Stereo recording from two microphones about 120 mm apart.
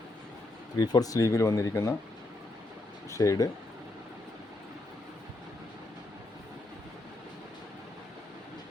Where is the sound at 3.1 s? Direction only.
25° left (ahead or behind).